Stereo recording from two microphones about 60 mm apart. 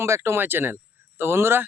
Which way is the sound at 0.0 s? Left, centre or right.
Right.